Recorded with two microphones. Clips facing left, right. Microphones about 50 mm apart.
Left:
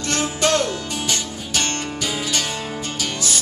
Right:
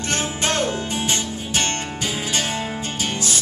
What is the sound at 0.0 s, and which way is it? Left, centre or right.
Music, right.